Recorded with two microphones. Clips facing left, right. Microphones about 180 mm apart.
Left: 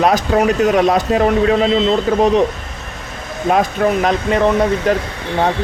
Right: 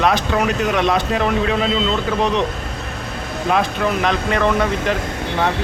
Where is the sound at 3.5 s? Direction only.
40° left (ahead or behind).